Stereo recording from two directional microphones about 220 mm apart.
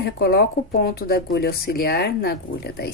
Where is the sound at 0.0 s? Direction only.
45° left (ahead or behind).